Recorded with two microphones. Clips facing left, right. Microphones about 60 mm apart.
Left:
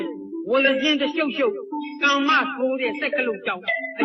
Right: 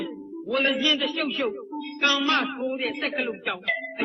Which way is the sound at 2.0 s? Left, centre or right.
Left.